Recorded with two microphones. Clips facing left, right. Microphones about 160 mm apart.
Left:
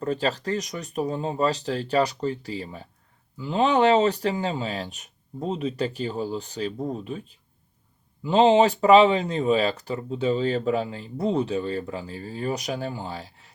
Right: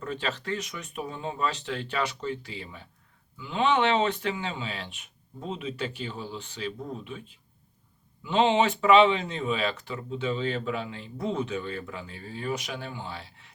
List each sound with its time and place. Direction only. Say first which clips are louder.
0.0 s speech: left 7 dB; 35° left (ahead or behind)